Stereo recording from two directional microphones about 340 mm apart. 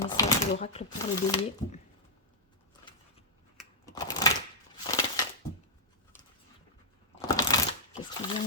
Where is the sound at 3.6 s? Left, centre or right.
Centre.